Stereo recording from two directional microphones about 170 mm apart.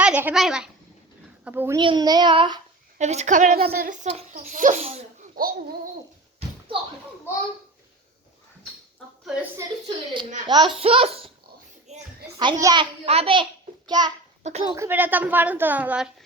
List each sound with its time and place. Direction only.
0.0 s a woman's voice: 10° right (ahead or behind)
1.8 s child singing: 25° right (ahead or behind)
3.0 s a child's voice: 40° right (ahead or behind)
5.4 s speech: 60° right (ahead or behind)
7.3 s a child's voice: 15° left (ahead or behind)
9.2 s a woman's voice: 5° right (ahead or behind)
10.4 s child singing: 25° right (ahead or behind)
10.8 s speech: 35° right (ahead or behind)
11.9 s a sound: 40° right (ahead or behind)
12.4 s child singing: 25° right (ahead or behind)
12.8 s a child's voice: 35° right (ahead or behind)
14.6 s child singing: 25° right (ahead or behind)
14.8 s a woman's voice: 10° right (ahead or behind)